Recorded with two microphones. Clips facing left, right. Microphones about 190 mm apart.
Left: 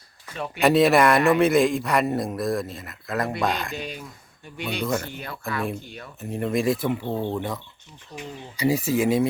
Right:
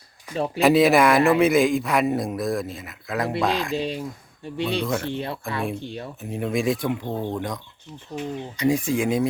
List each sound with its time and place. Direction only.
0.3 s speech: 30° right (ahead or behind)
0.6 s a man's voice: centre (ahead or behind)
3.8 s speech: 30° right (ahead or behind)
4.8 s a man's voice: centre (ahead or behind)
5.1 s speech: 30° right (ahead or behind)
6.1 s a man's voice: centre (ahead or behind)